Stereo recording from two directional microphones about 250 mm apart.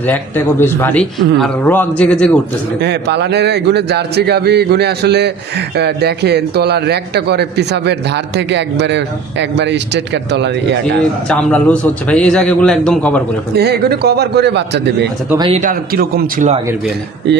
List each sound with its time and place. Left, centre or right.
0.0 s speech: centre
2.8 s a man's voice: right
11.2 s a man's voice: centre
13.6 s a man's voice: right
15.2 s speech: centre
15.6 s a man's voice: right